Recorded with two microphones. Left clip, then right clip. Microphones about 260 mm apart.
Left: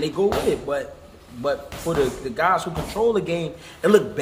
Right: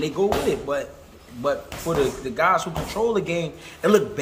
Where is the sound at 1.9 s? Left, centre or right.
Centre.